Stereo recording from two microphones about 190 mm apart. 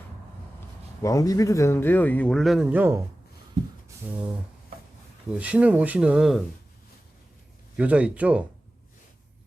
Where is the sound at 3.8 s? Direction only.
10° right (ahead or behind).